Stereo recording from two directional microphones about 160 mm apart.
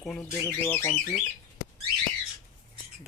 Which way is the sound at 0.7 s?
15° left (ahead or behind).